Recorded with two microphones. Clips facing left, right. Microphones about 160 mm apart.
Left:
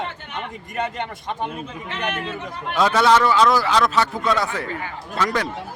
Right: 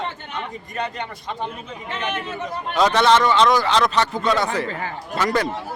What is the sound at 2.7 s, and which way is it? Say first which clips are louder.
A man's voice: even; 5° left (ahead or behind).